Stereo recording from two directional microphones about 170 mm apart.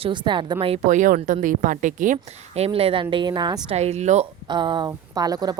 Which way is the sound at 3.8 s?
40° right (ahead or behind).